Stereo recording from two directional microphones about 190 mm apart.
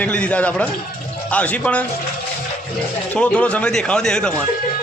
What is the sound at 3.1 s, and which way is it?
A man's voice, 5° left (ahead or behind).